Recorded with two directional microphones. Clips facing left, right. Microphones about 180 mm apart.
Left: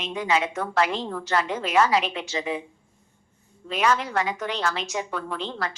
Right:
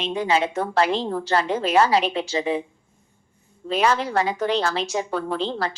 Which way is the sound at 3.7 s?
30° right (ahead or behind).